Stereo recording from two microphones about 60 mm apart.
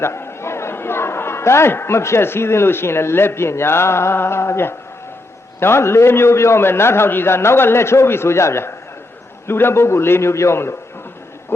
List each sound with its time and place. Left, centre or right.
0.0 s a man's voice: left